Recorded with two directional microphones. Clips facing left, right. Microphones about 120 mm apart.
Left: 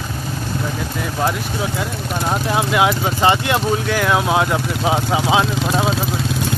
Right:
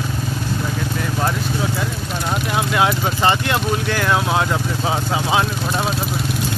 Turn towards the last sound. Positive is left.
turn(degrees=20)  # may be behind; listen again after turning